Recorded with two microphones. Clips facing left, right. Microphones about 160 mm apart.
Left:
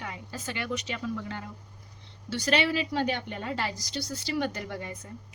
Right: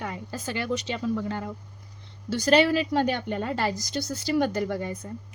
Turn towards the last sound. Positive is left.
turn(degrees=-40)  # may be behind; listen again after turning